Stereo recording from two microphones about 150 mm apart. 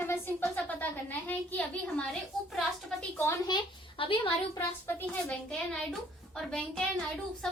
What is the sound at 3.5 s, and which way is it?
A child's voice, 35° left (ahead or behind).